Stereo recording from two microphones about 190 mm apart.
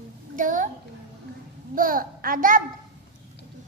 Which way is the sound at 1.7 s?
50° right (ahead or behind).